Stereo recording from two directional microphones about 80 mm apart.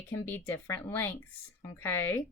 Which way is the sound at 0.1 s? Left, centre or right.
Left.